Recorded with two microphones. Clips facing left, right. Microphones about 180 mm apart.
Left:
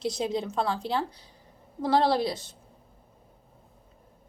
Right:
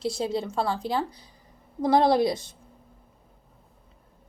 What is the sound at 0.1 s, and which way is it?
Speech, 5° right (ahead or behind).